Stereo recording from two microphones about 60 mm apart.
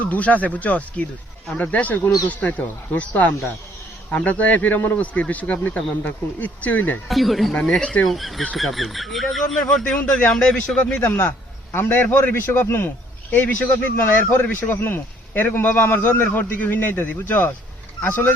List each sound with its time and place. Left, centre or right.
0.0 s a man's voice: left
7.1 s speech: centre
7.5 s a man's voice: centre
8.0 s speech: centre
11.0 s a man's voice: left